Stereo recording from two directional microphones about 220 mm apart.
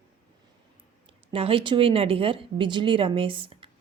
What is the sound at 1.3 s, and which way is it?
Speech, 25° right (ahead or behind).